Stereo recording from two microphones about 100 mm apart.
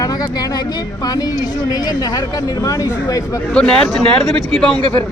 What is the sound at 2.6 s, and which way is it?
Speech, 35° left (ahead or behind).